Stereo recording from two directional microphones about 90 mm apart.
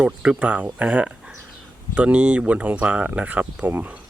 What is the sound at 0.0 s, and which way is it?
Speech, 15° right (ahead or behind).